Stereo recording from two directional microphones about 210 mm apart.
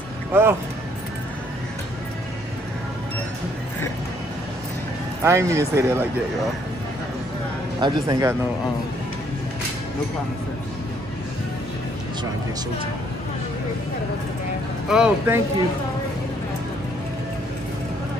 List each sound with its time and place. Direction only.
0.3 s speech: 10° right (ahead or behind)
5.2 s speech: 15° right (ahead or behind)
7.8 s speech: 15° right (ahead or behind)
14.9 s speech: 5° right (ahead or behind)